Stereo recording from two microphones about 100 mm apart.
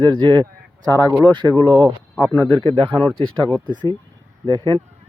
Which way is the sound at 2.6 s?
70° right (ahead or behind).